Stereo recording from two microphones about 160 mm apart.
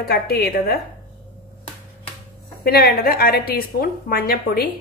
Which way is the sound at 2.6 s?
70° left (ahead or behind).